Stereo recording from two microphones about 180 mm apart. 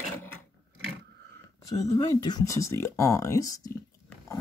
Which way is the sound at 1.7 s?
20° left (ahead or behind).